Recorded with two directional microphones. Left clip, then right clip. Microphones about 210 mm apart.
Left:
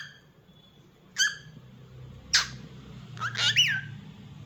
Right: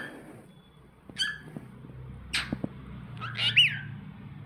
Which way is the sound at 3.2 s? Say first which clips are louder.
Right 1 dB; 30° left (ahead or behind).